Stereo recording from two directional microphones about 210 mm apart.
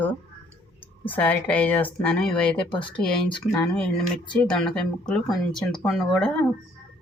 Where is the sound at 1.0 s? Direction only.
10° left (ahead or behind).